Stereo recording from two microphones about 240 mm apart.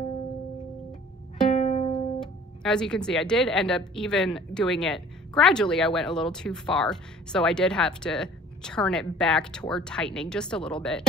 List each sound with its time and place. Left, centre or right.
1.5 s music: left
2.1 s speech: centre